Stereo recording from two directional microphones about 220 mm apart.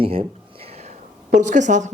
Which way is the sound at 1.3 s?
35° right (ahead or behind).